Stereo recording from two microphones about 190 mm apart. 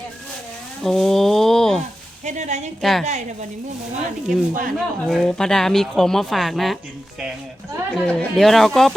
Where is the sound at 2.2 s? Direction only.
40° right (ahead or behind).